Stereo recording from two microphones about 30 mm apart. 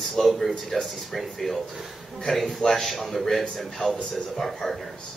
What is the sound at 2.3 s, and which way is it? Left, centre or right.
A man's voice, centre.